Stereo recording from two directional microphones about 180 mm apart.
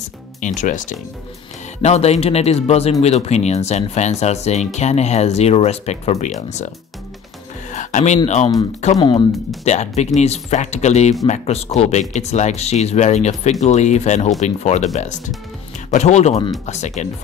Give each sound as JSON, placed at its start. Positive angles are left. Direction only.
{"t": 0.6, "sound": "speech", "side_deg": 45}
{"t": 7.7, "sound": "a sound", "side_deg": 45}
{"t": 8.9, "sound": "speech", "side_deg": 25}
{"t": 9.7, "sound": "speech", "side_deg": 40}